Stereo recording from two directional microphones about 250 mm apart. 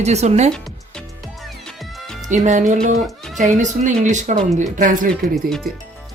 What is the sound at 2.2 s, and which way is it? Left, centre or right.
Speech, right.